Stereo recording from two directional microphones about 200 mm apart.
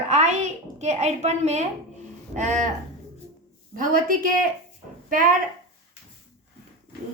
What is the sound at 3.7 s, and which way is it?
Speech, 45° right (ahead or behind).